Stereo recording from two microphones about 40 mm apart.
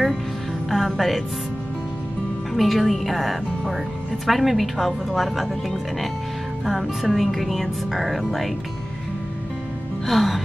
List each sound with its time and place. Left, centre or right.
0.7 s music: centre
2.5 s speech: centre
10.0 s speech: centre